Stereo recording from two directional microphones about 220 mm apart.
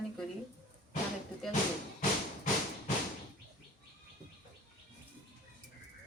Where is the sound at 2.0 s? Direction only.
35° left (ahead or behind).